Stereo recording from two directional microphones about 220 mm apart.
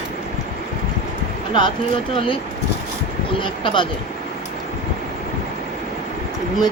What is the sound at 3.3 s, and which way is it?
Speech, 20° left (ahead or behind).